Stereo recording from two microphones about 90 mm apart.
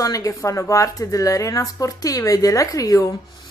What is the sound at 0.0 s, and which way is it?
A woman's voice, 40° left (ahead or behind).